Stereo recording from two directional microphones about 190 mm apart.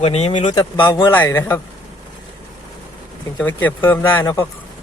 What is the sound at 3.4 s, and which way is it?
Speech, 10° left (ahead or behind).